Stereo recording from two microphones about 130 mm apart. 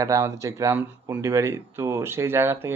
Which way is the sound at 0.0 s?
20° right (ahead or behind).